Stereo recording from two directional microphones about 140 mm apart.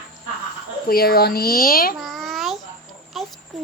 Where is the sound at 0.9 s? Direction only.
90° left.